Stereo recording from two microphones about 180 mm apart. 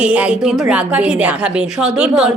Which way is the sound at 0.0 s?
5° right (ahead or behind).